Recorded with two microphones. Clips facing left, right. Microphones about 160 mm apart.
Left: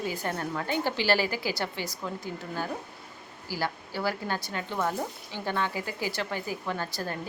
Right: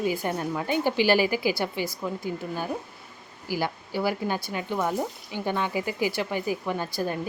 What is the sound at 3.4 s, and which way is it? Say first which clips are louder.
Speech: right 4 dB; 15° right (ahead or behind).